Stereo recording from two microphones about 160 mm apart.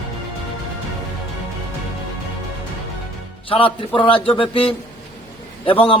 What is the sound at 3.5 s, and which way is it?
A man's voice, 35° left (ahead or behind).